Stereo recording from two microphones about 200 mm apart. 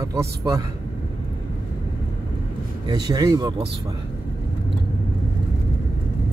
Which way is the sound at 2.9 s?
20° right (ahead or behind).